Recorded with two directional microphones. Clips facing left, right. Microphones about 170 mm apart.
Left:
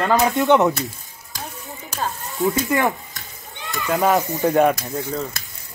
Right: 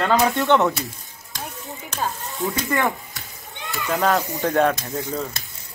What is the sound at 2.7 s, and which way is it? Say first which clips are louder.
Speech: even; 10° left (ahead or behind).